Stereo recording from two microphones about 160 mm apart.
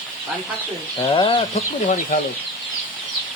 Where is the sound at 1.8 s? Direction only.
50° left (ahead or behind).